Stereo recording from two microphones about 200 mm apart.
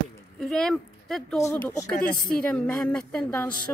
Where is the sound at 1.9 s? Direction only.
45° left (ahead or behind).